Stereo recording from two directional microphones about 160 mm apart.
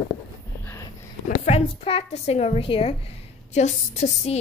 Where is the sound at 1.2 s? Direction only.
45° left (ahead or behind).